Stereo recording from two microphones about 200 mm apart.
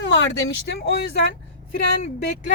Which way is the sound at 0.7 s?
55° left (ahead or behind).